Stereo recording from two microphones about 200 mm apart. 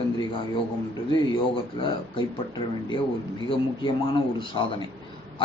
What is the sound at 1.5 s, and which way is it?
Speech, 25° left (ahead or behind).